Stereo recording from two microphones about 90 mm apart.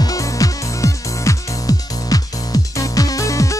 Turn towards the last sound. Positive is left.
turn(degrees=35)  # may be behind; listen again after turning